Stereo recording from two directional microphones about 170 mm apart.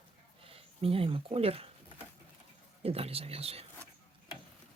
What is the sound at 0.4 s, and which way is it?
Speech, 35° right (ahead or behind).